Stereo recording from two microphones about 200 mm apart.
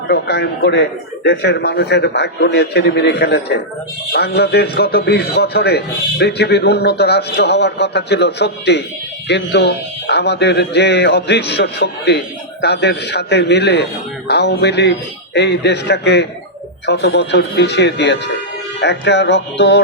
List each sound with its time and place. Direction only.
0.1 s a man's voice: 55° left (ahead or behind)